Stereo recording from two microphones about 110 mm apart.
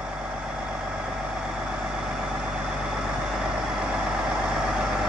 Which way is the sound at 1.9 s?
5° right (ahead or behind).